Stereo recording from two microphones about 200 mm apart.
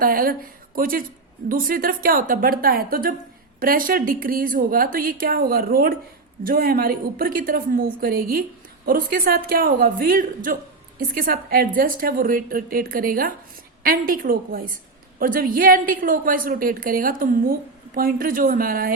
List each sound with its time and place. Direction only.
0.0 s a woman's voice: 45° right (ahead or behind)